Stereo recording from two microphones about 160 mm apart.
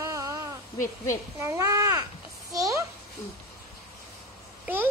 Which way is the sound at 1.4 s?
20° right (ahead or behind).